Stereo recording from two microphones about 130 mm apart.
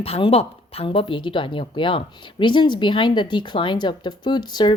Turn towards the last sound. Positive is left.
turn(degrees=35)  # may be behind; listen again after turning